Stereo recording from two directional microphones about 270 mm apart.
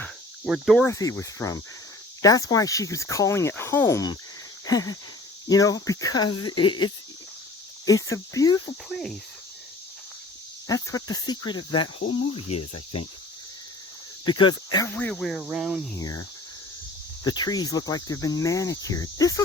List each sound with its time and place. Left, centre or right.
0.0 s cricket: centre
0.9 s speech: centre
4.6 s a sound: centre
5.5 s speech: centre
8.9 s speech: centre
10.7 s speech: centre
12.5 s cricket: left
14.3 s speech: centre
17.2 s speech: centre